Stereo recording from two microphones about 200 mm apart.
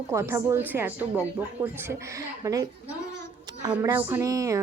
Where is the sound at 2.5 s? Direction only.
15° right (ahead or behind).